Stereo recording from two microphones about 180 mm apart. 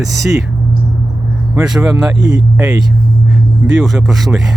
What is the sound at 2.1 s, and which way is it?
Speech, 90° right.